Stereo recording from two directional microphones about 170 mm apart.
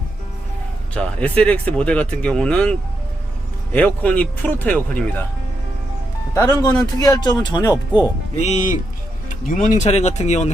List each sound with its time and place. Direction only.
0.9 s speech: 5° left (ahead or behind)
6.3 s speech: 20° left (ahead or behind)
8.4 s speech: 45° left (ahead or behind)